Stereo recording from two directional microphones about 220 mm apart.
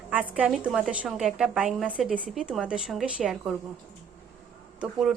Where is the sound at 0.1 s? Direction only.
5° right (ahead or behind).